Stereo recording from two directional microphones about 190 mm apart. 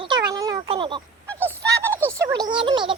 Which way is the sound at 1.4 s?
15° right (ahead or behind).